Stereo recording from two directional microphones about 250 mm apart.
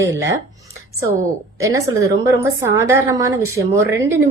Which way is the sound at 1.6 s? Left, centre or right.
Centre.